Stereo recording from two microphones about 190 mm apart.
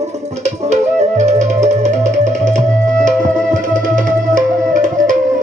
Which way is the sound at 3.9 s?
45° right (ahead or behind).